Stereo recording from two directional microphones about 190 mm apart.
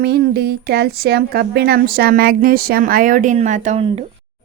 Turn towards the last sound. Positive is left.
turn(degrees=-30)  # may be behind; listen again after turning